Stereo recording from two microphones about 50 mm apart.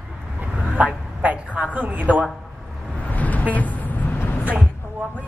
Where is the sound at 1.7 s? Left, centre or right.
Right.